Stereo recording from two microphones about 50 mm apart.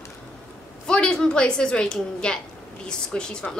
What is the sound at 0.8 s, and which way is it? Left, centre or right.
A woman's voice, centre.